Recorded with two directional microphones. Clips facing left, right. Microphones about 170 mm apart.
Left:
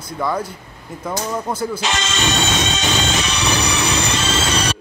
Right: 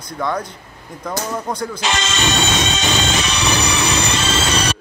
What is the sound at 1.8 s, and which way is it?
Music, 90° right.